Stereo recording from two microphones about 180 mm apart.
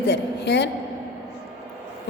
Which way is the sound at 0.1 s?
70° left (ahead or behind).